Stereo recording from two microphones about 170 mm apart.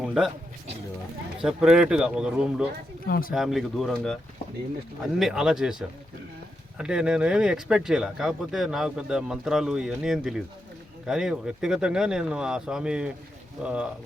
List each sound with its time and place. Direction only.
0.0 s a sound: 5° right (ahead or behind)
1.4 s speech: 5° right (ahead or behind)
3.1 s speech: 55° left (ahead or behind)
3.3 s speech: centre (ahead or behind)
5.2 s speech: 5° right (ahead or behind)
6.7 s speech: 5° right (ahead or behind)